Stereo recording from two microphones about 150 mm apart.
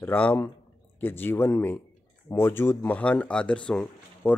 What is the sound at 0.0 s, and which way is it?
Speech, 10° left (ahead or behind).